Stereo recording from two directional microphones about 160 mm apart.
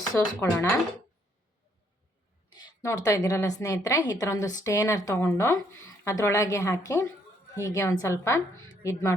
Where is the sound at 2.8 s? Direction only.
20° left (ahead or behind).